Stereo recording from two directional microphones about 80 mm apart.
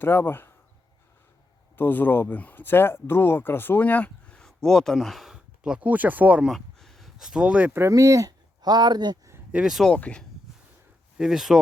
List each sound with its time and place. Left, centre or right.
0.0 s speech: left
1.7 s speech: left
4.4 s speech: centre
6.5 s a sound: centre
7.3 s speech: centre
7.7 s speech: right
7.9 s speech: right
8.6 s speech: right
9.8 s speech: centre
11.2 s speech: centre